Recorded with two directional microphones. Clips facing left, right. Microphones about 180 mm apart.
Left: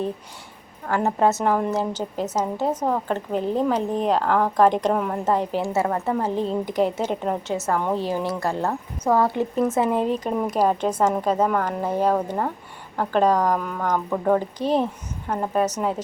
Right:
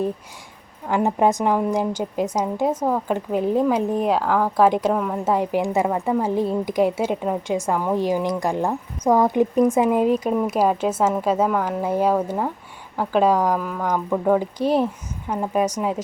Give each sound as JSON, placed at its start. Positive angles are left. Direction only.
{"t": 0.9, "sound": "a woman's voice", "side_deg": -15}
{"t": 5.3, "sound": "a woman's voice", "side_deg": -10}